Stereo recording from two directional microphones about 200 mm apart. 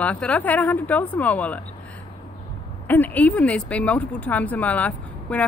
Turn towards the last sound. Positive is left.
turn(degrees=5)  # may be behind; listen again after turning